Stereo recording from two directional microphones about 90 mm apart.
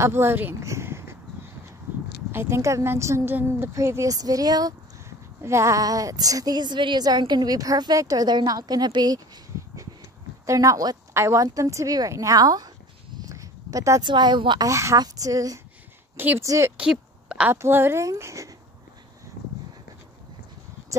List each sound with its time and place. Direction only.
0.0 s a woman's voice: 25° right (ahead or behind)
0.7 s a sound: 30° right (ahead or behind)
2.3 s a woman's voice: 30° right (ahead or behind)
5.4 s a woman's voice: 30° right (ahead or behind); by 9.2 s 50° right (ahead or behind)
10.4 s speech: 35° right (ahead or behind)
13.2 s a sound: 40° right (ahead or behind)
14.0 s speech: 55° right (ahead or behind)
14.6 s speech: 35° right (ahead or behind)
16.2 s a woman's voice: 25° right (ahead or behind)
16.7 s a sound: 10° right (ahead or behind)
17.5 s speech: 25° right (ahead or behind)